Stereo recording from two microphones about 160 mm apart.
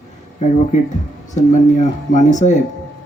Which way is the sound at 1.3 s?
50° left (ahead or behind).